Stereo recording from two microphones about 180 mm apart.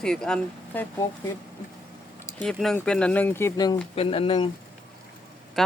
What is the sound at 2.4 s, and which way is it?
Speech, 5° left (ahead or behind).